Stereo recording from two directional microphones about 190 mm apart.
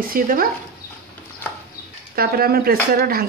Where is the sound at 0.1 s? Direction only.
50° right (ahead or behind).